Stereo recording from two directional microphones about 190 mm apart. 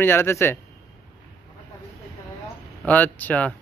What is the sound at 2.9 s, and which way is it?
Speech, 10° left (ahead or behind).